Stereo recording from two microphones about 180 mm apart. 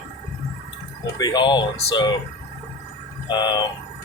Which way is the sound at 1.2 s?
25° left (ahead or behind).